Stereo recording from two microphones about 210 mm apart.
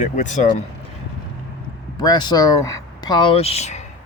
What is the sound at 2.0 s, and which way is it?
Speech, 20° left (ahead or behind).